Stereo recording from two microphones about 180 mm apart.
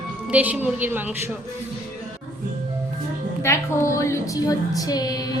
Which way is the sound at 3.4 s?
15° left (ahead or behind).